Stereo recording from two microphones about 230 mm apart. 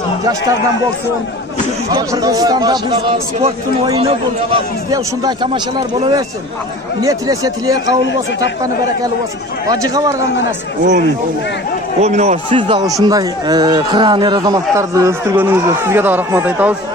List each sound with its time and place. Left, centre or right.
0.2 s speech: centre
1.9 s a man's voice: centre
9.7 s speech: centre
12.0 s a man's voice: right; by 16.7 s centre